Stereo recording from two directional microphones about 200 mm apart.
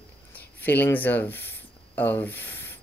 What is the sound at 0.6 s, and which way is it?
Speech, 10° left (ahead or behind).